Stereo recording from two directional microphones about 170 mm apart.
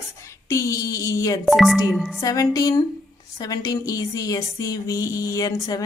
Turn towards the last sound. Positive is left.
turn(degrees=20)  # may be behind; listen again after turning